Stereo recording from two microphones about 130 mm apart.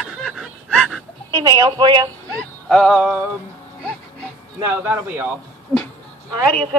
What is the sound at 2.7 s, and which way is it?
Music, centre (ahead or behind).